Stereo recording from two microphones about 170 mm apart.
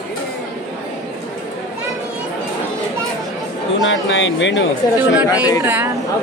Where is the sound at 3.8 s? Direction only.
90° left.